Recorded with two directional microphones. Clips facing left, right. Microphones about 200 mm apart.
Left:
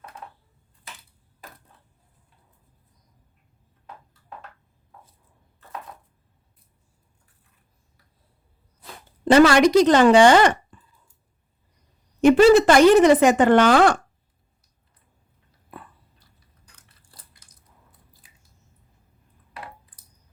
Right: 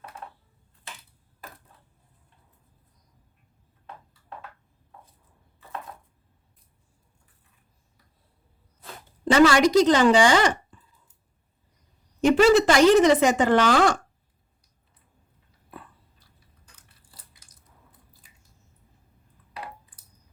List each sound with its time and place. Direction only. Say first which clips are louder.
9.2 s speech: left 3 dB; 65° left (ahead or behind)
12.2 s speech: left 4 dB; 55° left (ahead or behind)